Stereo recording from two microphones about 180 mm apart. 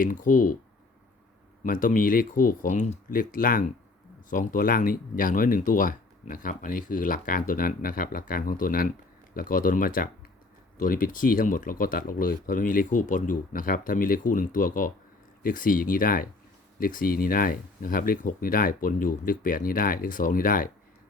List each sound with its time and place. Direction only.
0.0 s speech: 50° left (ahead or behind)
1.6 s speech: 50° left (ahead or behind)